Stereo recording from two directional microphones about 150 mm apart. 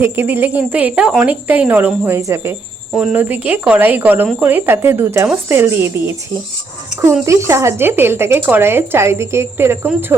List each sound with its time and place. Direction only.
0.0 s speech: 15° right (ahead or behind)
2.9 s speech: 5° right (ahead or behind)